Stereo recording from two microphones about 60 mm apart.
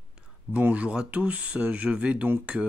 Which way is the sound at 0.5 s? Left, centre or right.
Right.